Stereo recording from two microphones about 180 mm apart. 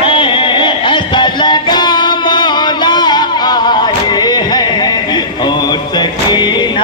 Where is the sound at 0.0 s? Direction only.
30° left (ahead or behind).